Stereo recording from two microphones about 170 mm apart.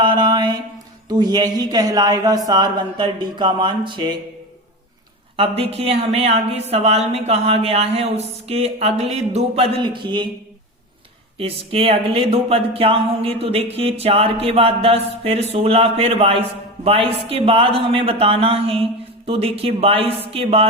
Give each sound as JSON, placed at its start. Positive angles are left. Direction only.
{"t": 0.0, "sound": "a sound", "side_deg": -25}
{"t": 1.0, "sound": "a man's voice", "side_deg": -25}
{"t": 5.4, "sound": "a man's voice", "side_deg": -35}
{"t": 11.3, "sound": "a man's voice", "side_deg": -35}